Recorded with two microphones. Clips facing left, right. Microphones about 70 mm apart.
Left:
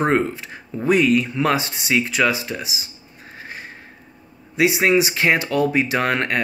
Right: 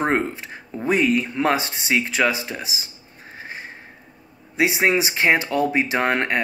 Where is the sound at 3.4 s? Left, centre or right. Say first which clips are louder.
Even; right.